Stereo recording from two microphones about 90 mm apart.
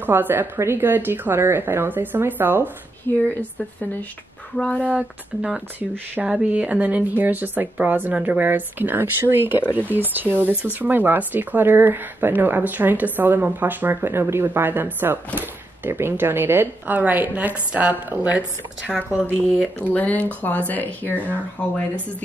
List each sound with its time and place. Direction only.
0.0 s speech: 20° right (ahead or behind)
4.7 s speech: 15° right (ahead or behind)
19.6 s speech: 15° left (ahead or behind)